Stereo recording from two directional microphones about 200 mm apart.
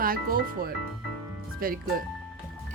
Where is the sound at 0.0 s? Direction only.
45° right (ahead or behind).